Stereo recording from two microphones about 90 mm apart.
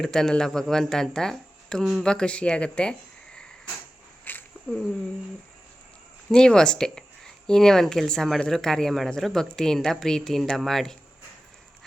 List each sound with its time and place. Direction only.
0.0 s speech: 5° left (ahead or behind)
2.0 s speech: 10° left (ahead or behind)
4.3 s a sound: 20° left (ahead or behind)
4.7 s speech: 5° left (ahead or behind)
6.3 s speech: 10° left (ahead or behind)